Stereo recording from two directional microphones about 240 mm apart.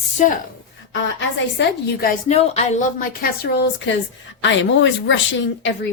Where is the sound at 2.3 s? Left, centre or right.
Left.